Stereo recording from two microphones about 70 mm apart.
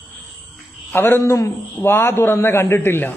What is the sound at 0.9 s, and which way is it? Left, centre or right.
A man's voice, left.